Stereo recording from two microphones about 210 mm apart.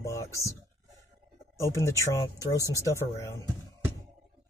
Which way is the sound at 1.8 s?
15° left (ahead or behind).